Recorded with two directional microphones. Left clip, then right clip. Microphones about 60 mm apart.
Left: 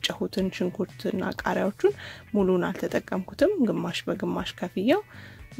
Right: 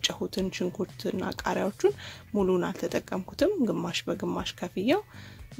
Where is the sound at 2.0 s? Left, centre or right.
Left.